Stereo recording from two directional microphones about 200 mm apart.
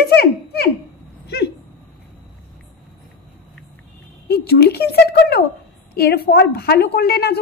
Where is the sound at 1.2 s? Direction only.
55° left (ahead or behind).